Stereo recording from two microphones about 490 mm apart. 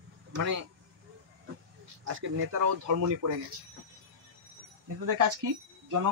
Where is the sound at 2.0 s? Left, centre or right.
Right.